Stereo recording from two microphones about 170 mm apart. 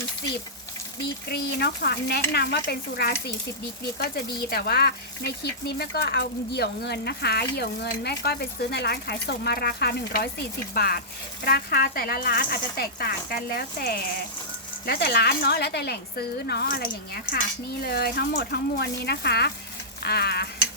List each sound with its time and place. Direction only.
1.3 s speech: 75° left (ahead or behind)